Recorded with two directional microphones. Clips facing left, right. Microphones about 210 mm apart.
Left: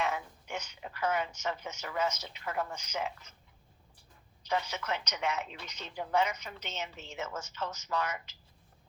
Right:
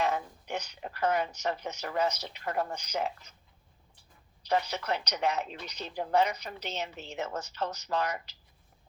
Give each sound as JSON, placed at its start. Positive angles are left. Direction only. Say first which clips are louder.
{"t": 0.0, "sound": "a woman's voice", "louder": "right 4 dB", "side_deg": -35}
{"t": 4.4, "sound": "a woman's voice", "louder": "right 4 dB", "side_deg": -35}